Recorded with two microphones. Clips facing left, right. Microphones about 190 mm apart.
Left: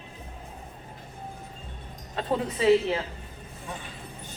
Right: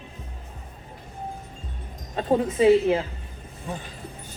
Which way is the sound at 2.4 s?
50° right (ahead or behind).